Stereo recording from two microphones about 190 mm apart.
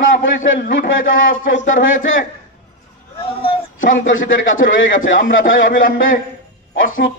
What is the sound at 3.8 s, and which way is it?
A man's voice, 90° left.